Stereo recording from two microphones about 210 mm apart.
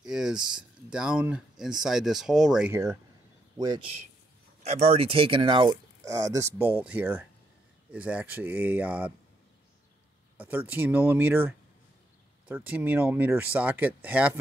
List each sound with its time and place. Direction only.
0.0 s speech: 5° right (ahead or behind)
3.5 s a man's voice: 20° right (ahead or behind)
10.3 s speech: 10° right (ahead or behind)